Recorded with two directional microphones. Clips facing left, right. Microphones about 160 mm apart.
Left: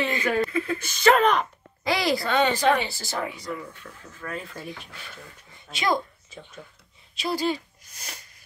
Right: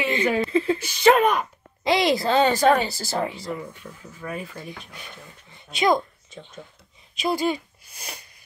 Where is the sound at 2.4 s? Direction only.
45° right (ahead or behind); by 3.9 s 25° right (ahead or behind).